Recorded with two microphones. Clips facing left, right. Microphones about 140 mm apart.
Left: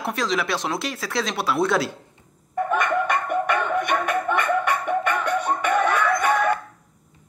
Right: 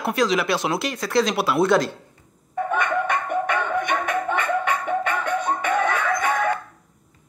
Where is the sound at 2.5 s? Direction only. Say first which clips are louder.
Left 1 dB; 55° left (ahead or behind).